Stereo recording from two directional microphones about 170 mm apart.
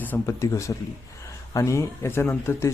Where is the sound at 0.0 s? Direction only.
15° left (ahead or behind).